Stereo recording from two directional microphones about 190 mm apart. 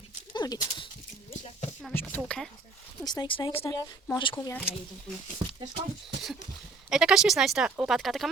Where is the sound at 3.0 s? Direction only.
20° left (ahead or behind).